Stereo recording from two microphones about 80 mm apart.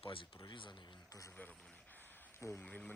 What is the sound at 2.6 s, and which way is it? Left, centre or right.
Speech, centre.